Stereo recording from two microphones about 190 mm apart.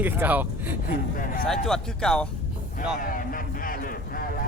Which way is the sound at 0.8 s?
45° left (ahead or behind).